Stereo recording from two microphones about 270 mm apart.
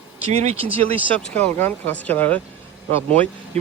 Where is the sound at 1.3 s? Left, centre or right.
Centre.